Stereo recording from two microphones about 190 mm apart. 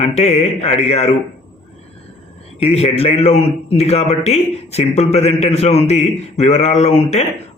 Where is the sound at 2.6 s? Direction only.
30° left (ahead or behind).